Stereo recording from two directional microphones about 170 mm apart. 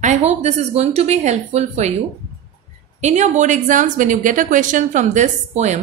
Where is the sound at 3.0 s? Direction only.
45° right (ahead or behind).